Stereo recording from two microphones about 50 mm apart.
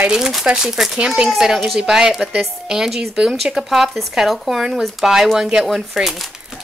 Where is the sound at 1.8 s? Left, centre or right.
Centre.